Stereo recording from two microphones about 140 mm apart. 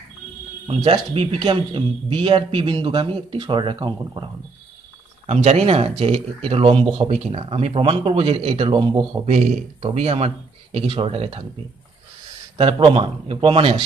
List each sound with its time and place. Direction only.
0.7 s speech: 40° right (ahead or behind)
5.2 s speech: 50° right (ahead or behind); by 9.2 s 30° right (ahead or behind)
9.2 s a man's voice: 60° right (ahead or behind)
9.9 s speech: 50° right (ahead or behind)
12.5 s speech: 40° right (ahead or behind)